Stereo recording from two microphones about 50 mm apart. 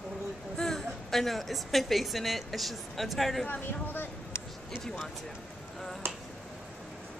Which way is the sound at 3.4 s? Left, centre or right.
Left.